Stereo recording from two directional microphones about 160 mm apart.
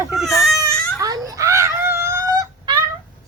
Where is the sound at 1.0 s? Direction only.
20° right (ahead or behind).